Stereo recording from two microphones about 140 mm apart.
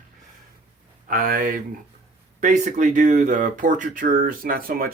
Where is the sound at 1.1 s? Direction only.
80° right.